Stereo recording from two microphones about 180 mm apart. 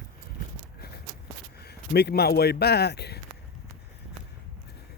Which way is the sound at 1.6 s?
65° left (ahead or behind).